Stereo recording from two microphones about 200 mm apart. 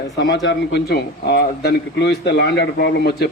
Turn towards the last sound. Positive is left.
turn(degrees=55)  # may be behind; listen again after turning